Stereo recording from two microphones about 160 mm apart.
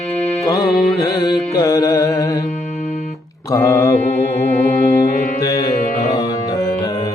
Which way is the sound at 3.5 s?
20° left (ahead or behind).